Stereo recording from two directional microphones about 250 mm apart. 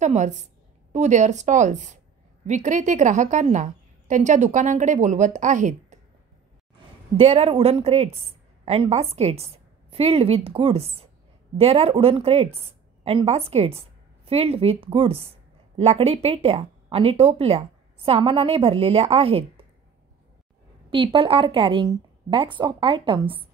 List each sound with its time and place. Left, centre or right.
0.0 s a woman's voice: right
7.2 s a woman's voice: right
20.9 s a woman's voice: right